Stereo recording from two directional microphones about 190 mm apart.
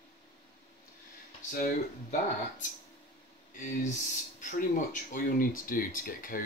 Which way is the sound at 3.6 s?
40° left (ahead or behind).